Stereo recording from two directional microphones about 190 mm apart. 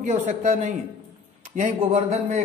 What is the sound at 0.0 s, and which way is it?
Speech, 35° right (ahead or behind).